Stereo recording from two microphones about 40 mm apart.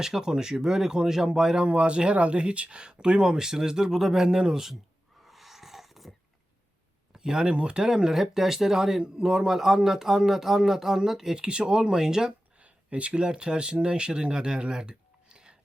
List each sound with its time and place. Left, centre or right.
0.0 s speech: centre
1.6 s speech: right
5.2 s a sound: centre
7.1 s a sound: centre
7.5 s speech: right
11.4 s speech: right
12.5 s speech: right